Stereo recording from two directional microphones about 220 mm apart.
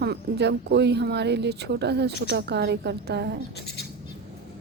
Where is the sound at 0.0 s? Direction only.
50° right (ahead or behind).